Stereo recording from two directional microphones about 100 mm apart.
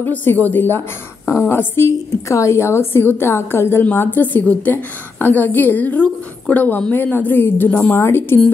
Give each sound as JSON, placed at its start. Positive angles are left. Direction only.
{"t": 0.0, "sound": "a woman's voice", "side_deg": 20}